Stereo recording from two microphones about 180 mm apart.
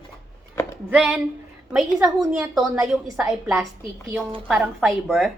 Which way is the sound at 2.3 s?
5° right (ahead or behind).